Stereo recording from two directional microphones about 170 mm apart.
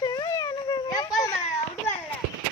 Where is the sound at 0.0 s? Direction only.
25° left (ahead or behind).